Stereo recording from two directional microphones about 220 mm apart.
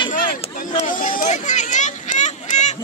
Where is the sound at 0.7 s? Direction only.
35° left (ahead or behind).